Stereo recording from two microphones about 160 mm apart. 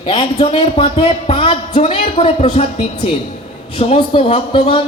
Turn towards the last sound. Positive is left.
turn(degrees=30)  # may be behind; listen again after turning